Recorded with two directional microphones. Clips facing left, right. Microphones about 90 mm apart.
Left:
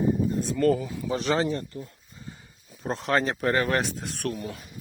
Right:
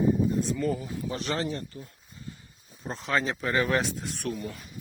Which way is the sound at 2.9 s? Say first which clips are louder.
Left 6 dB; 70° left (ahead or behind).